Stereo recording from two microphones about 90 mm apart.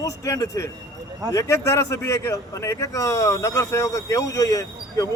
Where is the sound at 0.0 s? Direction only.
40° left (ahead or behind).